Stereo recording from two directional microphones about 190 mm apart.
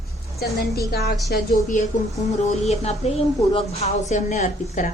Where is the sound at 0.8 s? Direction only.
55° left (ahead or behind).